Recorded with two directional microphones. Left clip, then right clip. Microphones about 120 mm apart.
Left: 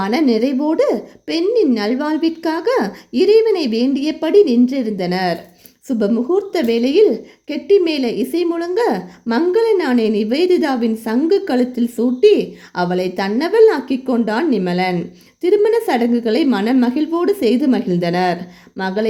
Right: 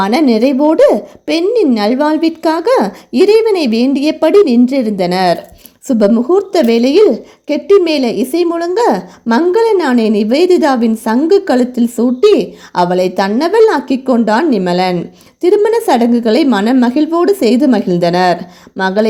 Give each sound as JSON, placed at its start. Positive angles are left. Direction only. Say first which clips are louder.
{"t": 0.0, "sound": "a woman's voice", "louder": "right 6 dB", "side_deg": -30}